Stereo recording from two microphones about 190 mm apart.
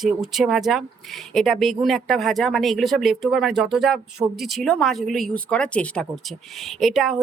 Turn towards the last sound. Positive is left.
turn(degrees=0)  # may be behind; listen again after turning